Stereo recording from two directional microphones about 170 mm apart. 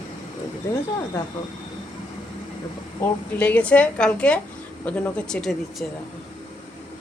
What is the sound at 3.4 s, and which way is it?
A woman's voice, 10° left (ahead or behind).